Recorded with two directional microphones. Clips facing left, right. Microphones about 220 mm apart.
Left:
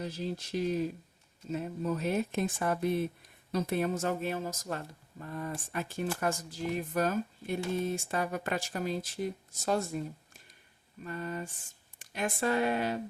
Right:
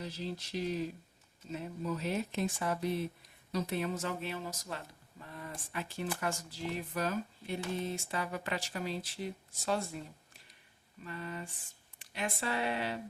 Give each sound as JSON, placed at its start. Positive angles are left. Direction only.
{"t": 0.0, "sound": "speech", "side_deg": 50}